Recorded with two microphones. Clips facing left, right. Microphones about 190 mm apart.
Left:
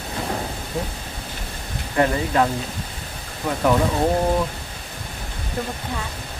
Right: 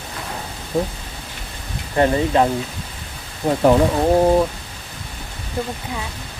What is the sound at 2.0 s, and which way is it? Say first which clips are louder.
Speech: right 3 dB; 25° right (ahead or behind).